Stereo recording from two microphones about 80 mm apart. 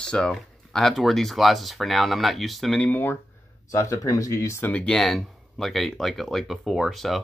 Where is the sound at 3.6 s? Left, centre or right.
Left.